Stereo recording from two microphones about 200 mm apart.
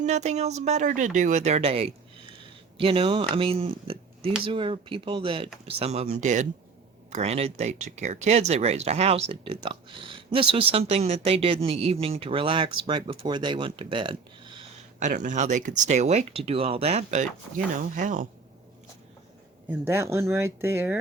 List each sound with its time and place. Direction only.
0.0 s speech: 35° right (ahead or behind)
14.9 s speech: 35° right (ahead or behind)
19.6 s speech: 10° right (ahead or behind)